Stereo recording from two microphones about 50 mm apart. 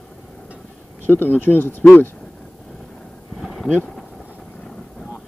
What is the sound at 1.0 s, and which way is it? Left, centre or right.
Speech, left.